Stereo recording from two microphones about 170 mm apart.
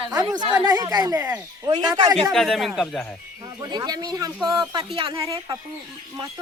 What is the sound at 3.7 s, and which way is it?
Speech, 25° right (ahead or behind).